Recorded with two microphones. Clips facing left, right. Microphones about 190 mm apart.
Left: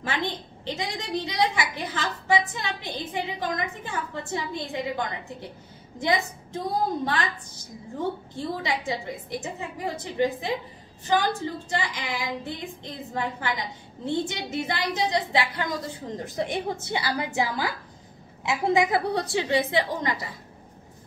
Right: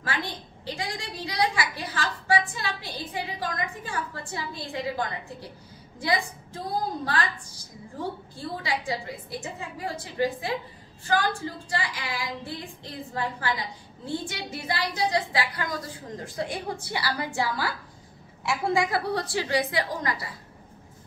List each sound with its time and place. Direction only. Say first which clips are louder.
0.0 s a sound: left 3 dB; 20° left (ahead or behind)
5.9 s a woman's voice: left 2 dB; 20° left (ahead or behind)
8.4 s female singing: even; 20° left (ahead or behind)